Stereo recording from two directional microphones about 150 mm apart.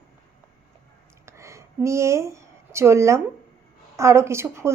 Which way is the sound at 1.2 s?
20° right (ahead or behind).